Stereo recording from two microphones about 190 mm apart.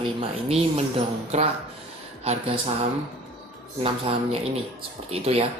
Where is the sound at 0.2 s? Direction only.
30° right (ahead or behind).